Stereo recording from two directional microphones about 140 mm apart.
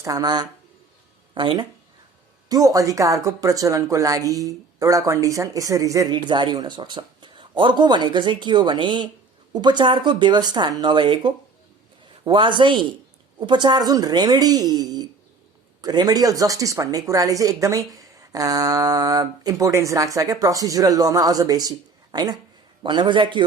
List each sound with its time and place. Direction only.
0.0 s speech: 25° right (ahead or behind)